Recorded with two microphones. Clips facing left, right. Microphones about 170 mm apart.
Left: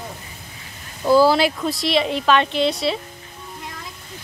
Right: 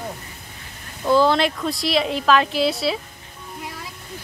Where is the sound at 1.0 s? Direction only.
5° left (ahead or behind).